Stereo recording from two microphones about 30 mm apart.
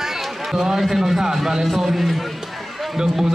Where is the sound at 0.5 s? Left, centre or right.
Right.